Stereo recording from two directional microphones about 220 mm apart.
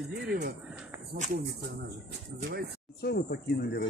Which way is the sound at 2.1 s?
50° right (ahead or behind).